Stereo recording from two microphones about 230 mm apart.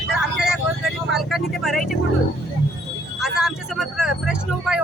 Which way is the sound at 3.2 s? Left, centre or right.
Centre.